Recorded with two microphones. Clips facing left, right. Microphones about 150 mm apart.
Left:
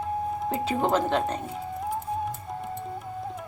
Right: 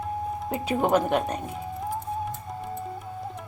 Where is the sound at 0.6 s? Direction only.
15° right (ahead or behind).